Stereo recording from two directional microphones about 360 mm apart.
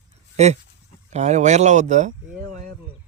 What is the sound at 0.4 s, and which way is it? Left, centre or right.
Speech, centre.